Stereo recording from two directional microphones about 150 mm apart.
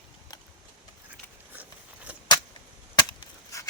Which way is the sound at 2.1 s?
10° right (ahead or behind).